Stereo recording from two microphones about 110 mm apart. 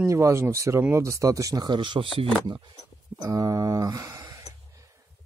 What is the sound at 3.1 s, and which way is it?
Speech, 35° right (ahead or behind).